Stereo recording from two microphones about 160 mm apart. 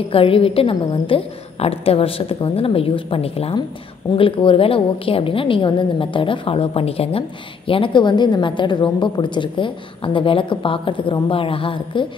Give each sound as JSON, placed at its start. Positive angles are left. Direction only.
{"t": 0.1, "sound": "a woman's voice", "side_deg": 35}